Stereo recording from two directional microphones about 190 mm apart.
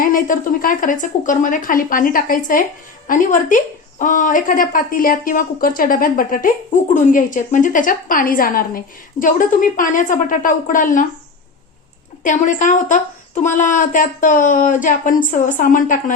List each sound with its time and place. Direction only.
0.1 s a woman's voice: 50° left (ahead or behind)
12.2 s a woman's voice: 40° left (ahead or behind)